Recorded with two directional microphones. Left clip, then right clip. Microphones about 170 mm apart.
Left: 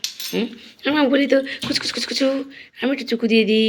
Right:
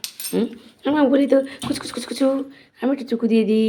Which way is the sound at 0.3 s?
25° right (ahead or behind).